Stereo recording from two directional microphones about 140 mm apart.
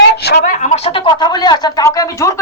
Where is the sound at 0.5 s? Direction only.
55° left (ahead or behind).